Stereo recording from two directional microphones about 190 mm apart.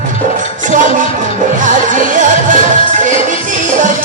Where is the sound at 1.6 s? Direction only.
40° right (ahead or behind).